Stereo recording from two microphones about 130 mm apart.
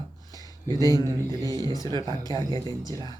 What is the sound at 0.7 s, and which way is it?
Speech, 85° left.